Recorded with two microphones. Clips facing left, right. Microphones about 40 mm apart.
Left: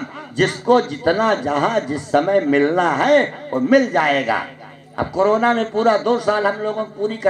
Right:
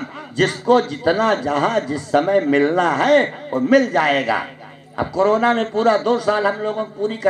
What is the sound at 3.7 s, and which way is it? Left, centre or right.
A man's voice, right.